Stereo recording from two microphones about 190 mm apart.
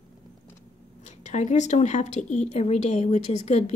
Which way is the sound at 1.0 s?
40° left (ahead or behind).